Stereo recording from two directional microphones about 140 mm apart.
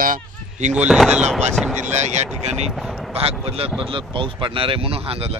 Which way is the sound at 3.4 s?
45° right (ahead or behind).